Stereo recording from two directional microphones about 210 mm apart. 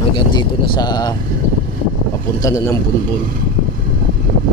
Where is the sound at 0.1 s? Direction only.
20° left (ahead or behind).